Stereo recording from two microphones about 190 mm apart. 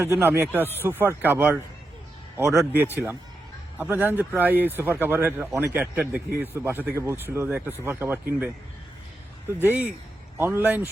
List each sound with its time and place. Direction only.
0.0 s speech: 10° right (ahead or behind)
2.6 s speech: 10° right (ahead or behind)
9.6 s speech: 10° right (ahead or behind)